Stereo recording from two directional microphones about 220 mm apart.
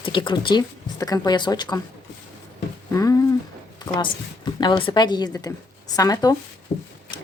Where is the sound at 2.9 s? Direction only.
15° left (ahead or behind).